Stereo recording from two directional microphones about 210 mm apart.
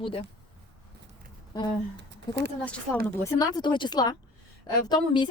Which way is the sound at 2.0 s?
55° right (ahead or behind).